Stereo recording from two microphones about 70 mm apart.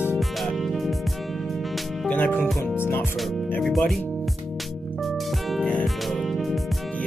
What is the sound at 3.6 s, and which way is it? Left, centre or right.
Speech, centre.